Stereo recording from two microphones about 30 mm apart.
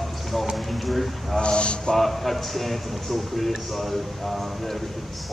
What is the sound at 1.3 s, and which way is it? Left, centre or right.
Speech, left.